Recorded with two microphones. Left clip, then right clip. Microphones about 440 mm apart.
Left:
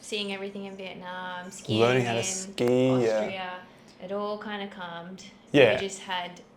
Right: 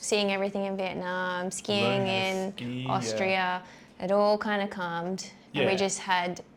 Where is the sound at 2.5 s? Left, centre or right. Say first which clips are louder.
Left 8 dB; left.